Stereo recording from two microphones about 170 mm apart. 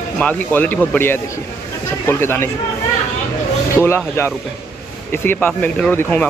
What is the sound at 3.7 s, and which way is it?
Speech, 15° left (ahead or behind).